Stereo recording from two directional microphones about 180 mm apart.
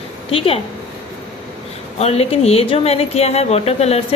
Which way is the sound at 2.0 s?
35° left (ahead or behind).